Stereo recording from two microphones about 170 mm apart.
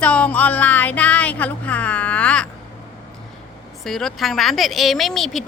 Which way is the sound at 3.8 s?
Centre (ahead or behind).